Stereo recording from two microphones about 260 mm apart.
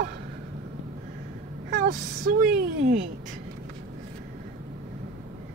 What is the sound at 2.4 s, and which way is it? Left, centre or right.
Speech, right.